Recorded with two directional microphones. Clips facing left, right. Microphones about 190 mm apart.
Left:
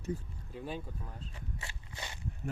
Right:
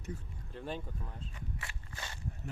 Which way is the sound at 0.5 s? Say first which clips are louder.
Even; 5° left (ahead or behind).